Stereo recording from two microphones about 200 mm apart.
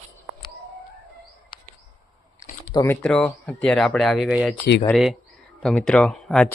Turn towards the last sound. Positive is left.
turn(degrees=5)  # may be behind; listen again after turning